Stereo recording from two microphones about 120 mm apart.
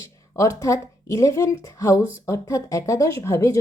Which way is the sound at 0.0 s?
25° left (ahead or behind).